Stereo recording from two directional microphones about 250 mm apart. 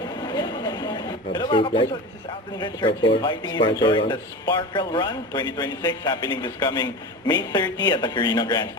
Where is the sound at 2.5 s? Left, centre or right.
Centre.